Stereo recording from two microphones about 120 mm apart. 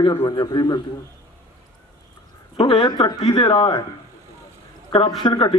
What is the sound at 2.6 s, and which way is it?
Speech, 50° left (ahead or behind).